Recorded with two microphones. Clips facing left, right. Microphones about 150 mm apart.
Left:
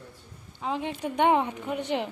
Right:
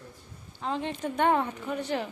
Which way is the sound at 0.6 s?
10° left (ahead or behind).